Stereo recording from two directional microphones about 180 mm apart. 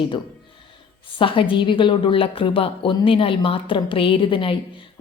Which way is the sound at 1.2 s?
30° left (ahead or behind).